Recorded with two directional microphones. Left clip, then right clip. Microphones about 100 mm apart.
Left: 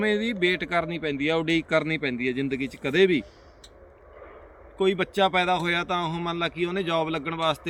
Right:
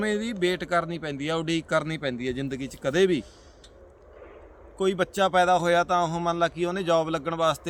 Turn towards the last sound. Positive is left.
turn(degrees=-50)  # may be behind; listen again after turning